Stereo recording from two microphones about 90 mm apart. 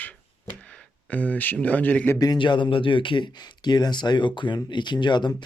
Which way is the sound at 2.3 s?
60° left (ahead or behind).